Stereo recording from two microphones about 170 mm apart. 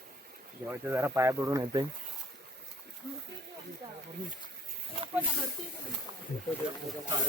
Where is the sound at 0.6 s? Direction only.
15° right (ahead or behind).